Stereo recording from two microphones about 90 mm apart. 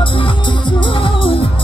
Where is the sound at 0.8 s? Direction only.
70° left (ahead or behind).